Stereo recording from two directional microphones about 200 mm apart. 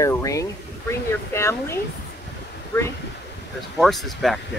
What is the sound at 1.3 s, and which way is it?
Speech, 15° left (ahead or behind).